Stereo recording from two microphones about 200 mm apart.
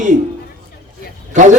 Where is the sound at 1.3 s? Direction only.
40° right (ahead or behind).